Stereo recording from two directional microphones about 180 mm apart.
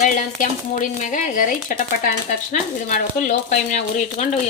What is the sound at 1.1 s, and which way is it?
Speech, 50° left (ahead or behind).